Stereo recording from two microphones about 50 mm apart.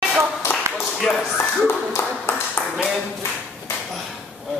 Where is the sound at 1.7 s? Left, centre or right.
Left.